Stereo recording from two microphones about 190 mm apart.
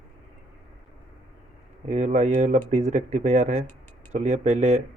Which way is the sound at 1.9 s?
35° right (ahead or behind).